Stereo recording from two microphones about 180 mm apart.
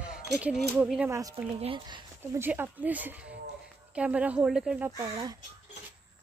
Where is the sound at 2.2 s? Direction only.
10° right (ahead or behind).